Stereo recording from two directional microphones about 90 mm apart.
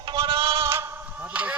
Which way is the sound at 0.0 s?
60° right (ahead or behind).